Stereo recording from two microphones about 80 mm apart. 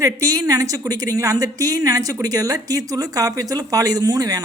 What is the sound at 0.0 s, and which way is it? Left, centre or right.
Speech, right.